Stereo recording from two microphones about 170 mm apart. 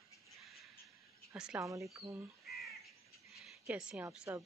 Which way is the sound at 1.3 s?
5° right (ahead or behind).